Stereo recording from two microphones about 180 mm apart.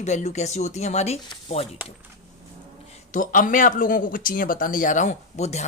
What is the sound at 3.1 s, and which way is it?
Speech, 45° left (ahead or behind).